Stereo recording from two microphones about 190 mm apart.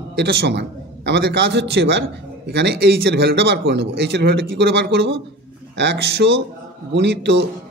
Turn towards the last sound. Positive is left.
turn(degrees=-65)  # may be behind; listen again after turning